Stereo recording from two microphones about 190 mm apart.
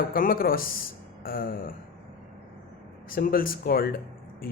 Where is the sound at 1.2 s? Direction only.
50° left (ahead or behind).